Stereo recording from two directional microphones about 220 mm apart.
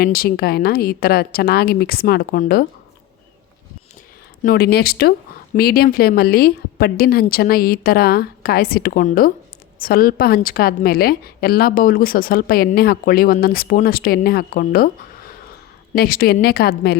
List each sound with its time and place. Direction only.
0.0 s a woman's voice: 45° left (ahead or behind)
4.4 s a woman's voice: 45° left (ahead or behind)